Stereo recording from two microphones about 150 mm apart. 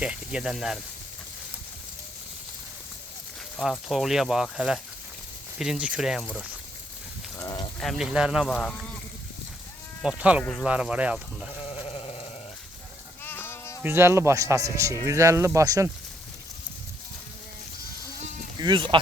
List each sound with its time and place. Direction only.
0.0 s speech: 5° right (ahead or behind)
3.6 s speech: centre (ahead or behind)
7.3 s a sound: 25° left (ahead or behind)
7.8 s speech: centre (ahead or behind)
8.5 s speech: 5° left (ahead or behind)
10.0 s speech: 5° right (ahead or behind)
10.4 s speech: 5° left (ahead or behind)
10.7 s speech: 10° right (ahead or behind)
11.6 s sheep: 40° left (ahead or behind)
13.2 s sheep: 15° left (ahead or behind)
13.8 s speech: 15° right (ahead or behind)
18.6 s speech: 30° right (ahead or behind)